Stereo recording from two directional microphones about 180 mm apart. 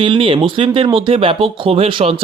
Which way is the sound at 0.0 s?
30° right (ahead or behind).